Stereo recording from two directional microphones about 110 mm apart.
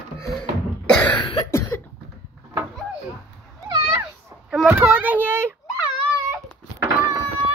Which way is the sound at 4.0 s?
5° right (ahead or behind).